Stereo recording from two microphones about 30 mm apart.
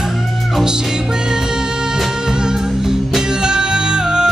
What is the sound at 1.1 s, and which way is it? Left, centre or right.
Music, right.